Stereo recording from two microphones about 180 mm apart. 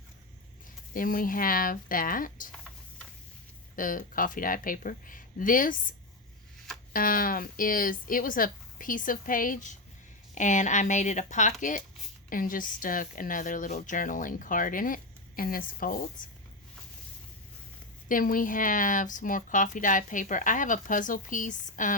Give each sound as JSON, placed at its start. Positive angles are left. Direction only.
{"t": 0.9, "sound": "a woman's voice", "side_deg": 50}
{"t": 3.8, "sound": "a woman's voice", "side_deg": 50}
{"t": 6.9, "sound": "a woman's voice", "side_deg": 50}
{"t": 18.1, "sound": "a woman's voice", "side_deg": 50}